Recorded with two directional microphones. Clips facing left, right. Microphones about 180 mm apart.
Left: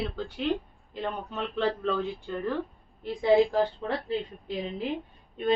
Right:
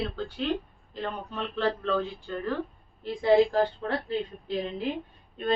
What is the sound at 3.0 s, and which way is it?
Speech, 15° left (ahead or behind).